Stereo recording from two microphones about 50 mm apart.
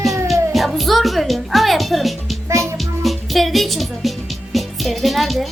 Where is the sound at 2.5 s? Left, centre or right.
Right.